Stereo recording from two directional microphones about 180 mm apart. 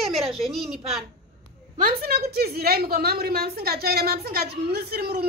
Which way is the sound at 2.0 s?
60° right (ahead or behind).